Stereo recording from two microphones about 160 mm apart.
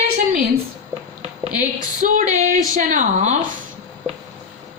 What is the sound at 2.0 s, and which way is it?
A woman's voice, 50° right (ahead or behind).